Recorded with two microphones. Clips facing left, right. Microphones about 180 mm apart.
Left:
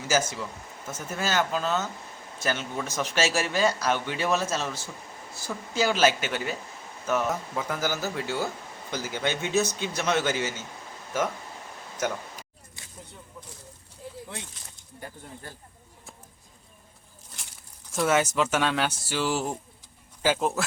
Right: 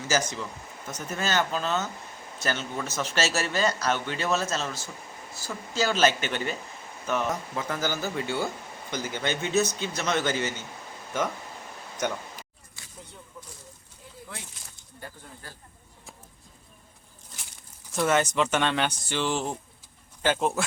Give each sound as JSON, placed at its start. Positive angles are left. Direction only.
{"t": 0.1, "sound": "speech", "side_deg": 5}
{"t": 5.7, "sound": "speech", "side_deg": 10}
{"t": 12.0, "sound": "speech", "side_deg": 5}
{"t": 14.0, "sound": "a sound", "side_deg": 35}
{"t": 17.9, "sound": "speech", "side_deg": 5}